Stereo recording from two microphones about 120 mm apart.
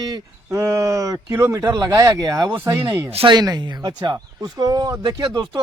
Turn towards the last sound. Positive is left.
turn(degrees=-35)  # may be behind; listen again after turning